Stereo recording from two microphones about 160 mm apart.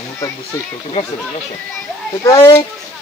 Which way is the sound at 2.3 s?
30° left (ahead or behind).